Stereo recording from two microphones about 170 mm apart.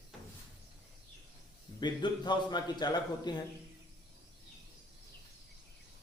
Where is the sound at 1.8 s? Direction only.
25° left (ahead or behind).